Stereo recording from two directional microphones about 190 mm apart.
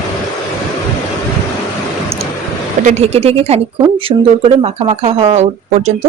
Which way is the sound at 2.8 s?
40° right (ahead or behind).